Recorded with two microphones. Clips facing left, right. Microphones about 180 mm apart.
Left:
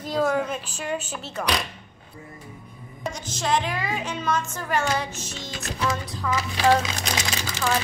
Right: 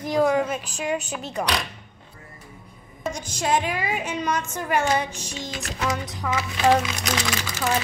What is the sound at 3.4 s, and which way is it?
A woman's voice, 15° right (ahead or behind).